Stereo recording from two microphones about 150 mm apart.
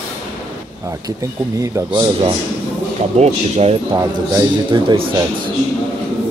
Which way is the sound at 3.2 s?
45° right (ahead or behind).